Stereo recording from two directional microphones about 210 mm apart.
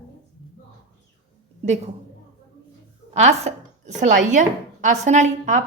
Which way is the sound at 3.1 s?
35° right (ahead or behind).